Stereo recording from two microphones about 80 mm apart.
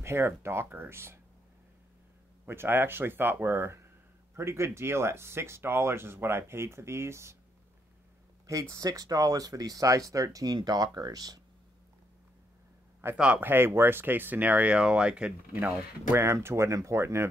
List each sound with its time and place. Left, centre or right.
0.0 s speech: right
2.4 s speech: right
8.5 s speech: right
13.1 s speech: centre
13.4 s speech: right; by 15.3 s centre
16.2 s speech: right